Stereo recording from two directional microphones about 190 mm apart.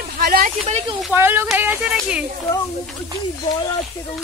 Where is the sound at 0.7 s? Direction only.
30° right (ahead or behind).